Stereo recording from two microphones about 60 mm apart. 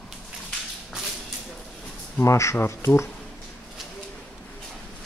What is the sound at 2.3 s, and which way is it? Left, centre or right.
Speech, left.